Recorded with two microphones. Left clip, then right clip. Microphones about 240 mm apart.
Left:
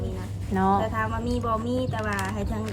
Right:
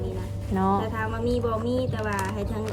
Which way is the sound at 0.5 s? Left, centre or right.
Left.